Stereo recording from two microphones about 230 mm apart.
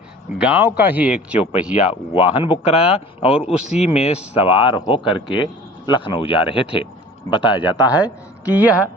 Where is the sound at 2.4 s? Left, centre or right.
Left.